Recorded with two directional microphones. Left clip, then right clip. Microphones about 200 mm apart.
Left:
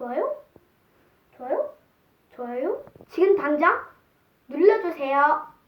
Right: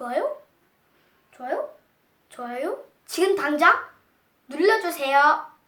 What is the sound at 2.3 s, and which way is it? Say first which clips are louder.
Speech: left 1 dB; 20° right (ahead or behind).